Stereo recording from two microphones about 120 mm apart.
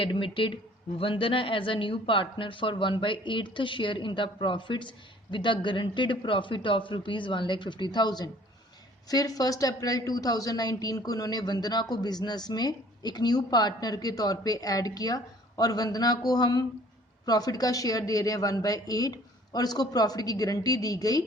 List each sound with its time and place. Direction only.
0.0 s a woman's voice: 45° left (ahead or behind)